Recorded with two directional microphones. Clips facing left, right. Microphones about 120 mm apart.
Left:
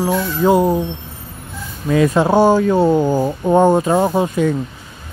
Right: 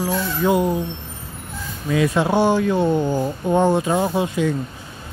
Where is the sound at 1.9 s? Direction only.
45° left (ahead or behind).